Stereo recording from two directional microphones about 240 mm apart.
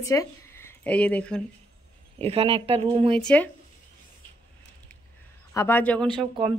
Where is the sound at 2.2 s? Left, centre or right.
Right.